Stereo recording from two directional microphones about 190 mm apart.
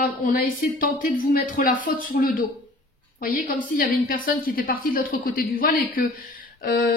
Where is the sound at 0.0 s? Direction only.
45° left (ahead or behind).